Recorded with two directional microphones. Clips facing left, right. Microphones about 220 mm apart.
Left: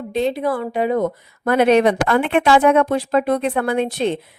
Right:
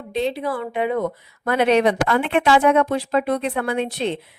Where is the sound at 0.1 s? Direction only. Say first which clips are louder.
Left 3 dB; 50° left (ahead or behind).